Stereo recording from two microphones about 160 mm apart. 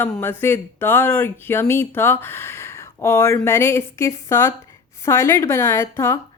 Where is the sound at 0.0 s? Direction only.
15° left (ahead or behind).